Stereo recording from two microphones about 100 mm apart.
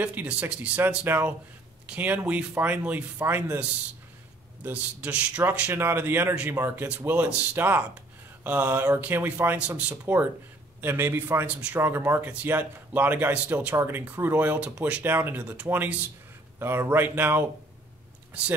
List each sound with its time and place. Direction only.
0.0 s speech: 15° right (ahead or behind)
4.6 s speech: 15° right (ahead or behind)
15.4 s speech: 10° right (ahead or behind)